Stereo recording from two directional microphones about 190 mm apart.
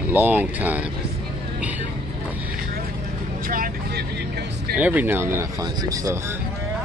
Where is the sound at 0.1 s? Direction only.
10° right (ahead or behind).